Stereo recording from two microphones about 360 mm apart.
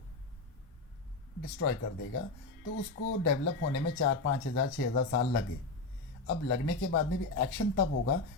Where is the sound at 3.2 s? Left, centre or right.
Left.